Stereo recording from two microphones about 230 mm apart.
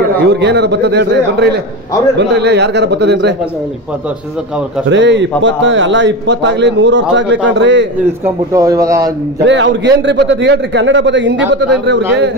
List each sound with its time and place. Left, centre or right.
0.2 s a man's voice: right
4.8 s a man's voice: right
8.5 s a man's voice: centre
9.4 s a man's voice: right